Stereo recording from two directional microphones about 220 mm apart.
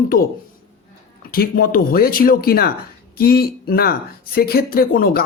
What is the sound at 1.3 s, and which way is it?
Speech, 45° left (ahead or behind).